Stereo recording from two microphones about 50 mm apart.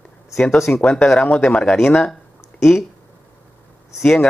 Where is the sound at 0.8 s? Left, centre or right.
Left.